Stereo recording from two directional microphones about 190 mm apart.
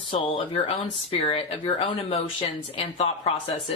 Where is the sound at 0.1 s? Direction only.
25° left (ahead or behind).